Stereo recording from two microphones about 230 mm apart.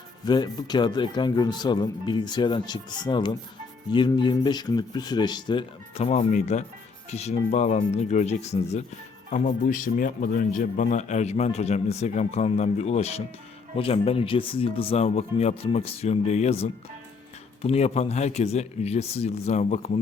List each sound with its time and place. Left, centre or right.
0.3 s a man's voice: centre